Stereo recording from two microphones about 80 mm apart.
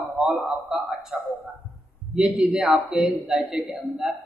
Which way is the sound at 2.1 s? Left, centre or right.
Centre.